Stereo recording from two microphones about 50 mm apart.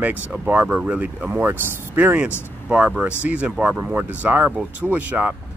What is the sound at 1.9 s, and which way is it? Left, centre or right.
Speech, right.